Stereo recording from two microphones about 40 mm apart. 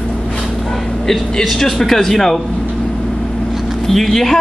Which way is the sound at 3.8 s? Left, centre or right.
Centre.